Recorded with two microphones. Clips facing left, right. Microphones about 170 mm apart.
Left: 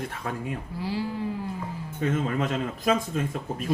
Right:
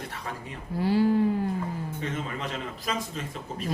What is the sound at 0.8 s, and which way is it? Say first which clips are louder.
Speech: right 9 dB; 55° right (ahead or behind).